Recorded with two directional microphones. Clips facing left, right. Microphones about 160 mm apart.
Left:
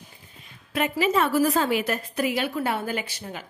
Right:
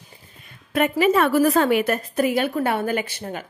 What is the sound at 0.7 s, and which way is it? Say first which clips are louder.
A woman's voice: right 5 dB; 55° right (ahead or behind).